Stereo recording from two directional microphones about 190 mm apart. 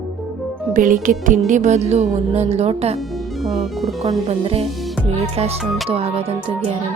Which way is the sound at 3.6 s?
Centre (ahead or behind).